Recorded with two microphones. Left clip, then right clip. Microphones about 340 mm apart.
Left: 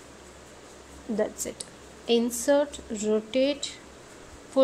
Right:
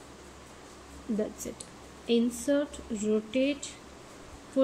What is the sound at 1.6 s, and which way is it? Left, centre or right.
Speech, centre.